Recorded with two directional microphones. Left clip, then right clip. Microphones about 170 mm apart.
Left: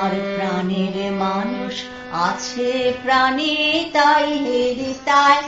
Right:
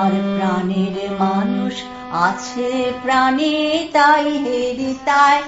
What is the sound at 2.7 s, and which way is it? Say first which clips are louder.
Music: left 1 dB; 45° right (ahead or behind).